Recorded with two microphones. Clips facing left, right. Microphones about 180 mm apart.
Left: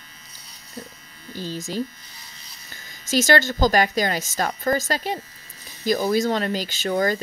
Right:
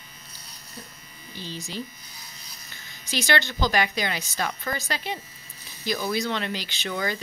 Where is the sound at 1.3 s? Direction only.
45° left (ahead or behind).